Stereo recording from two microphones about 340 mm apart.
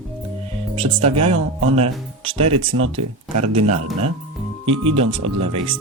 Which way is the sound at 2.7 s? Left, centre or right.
Right.